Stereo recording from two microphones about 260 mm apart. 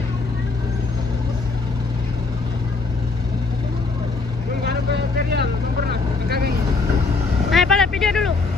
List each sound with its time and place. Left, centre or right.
4.6 s vehicle: right
7.5 s vehicle: centre